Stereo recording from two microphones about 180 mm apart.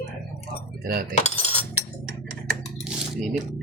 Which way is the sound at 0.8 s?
60° right (ahead or behind).